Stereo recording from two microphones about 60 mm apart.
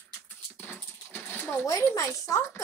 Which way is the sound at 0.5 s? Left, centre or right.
Left.